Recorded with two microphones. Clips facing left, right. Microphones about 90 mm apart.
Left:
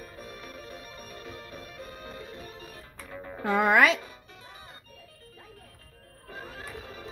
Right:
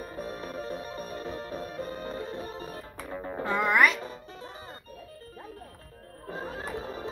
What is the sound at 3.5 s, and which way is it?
Speech, 90° left.